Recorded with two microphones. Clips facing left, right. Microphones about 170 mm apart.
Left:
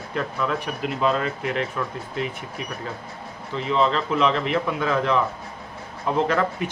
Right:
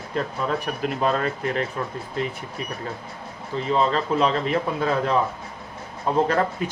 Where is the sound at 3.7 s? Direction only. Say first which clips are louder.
Even; 40° right (ahead or behind).